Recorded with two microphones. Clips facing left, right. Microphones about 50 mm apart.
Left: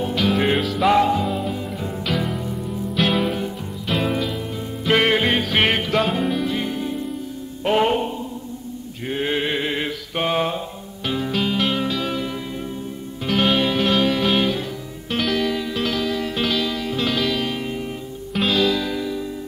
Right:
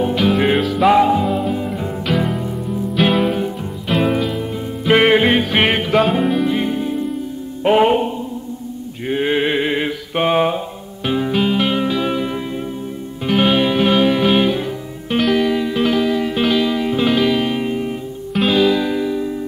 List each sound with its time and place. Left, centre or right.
0.0 s music: centre
9.1 s mantra: centre
11.1 s music: centre
13.3 s music: centre